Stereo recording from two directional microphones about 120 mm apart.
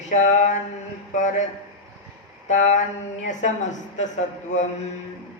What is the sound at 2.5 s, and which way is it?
A woman's voice, 90° left.